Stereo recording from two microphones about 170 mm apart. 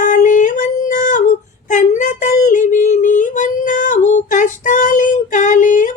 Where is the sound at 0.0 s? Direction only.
50° left (ahead or behind).